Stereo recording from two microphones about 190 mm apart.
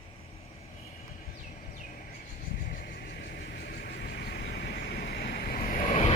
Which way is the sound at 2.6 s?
50° left (ahead or behind).